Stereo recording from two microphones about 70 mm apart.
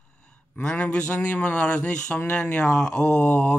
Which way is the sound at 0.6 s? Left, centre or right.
Centre.